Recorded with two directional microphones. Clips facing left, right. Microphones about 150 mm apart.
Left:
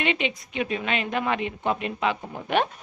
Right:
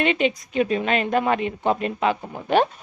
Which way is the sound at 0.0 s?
40° right (ahead or behind).